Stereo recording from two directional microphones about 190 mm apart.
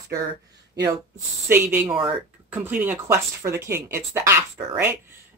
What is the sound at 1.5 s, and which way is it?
Speech, 10° right (ahead or behind).